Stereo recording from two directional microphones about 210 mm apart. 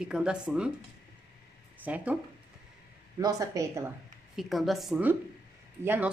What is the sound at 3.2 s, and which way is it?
Speech, 15° right (ahead or behind).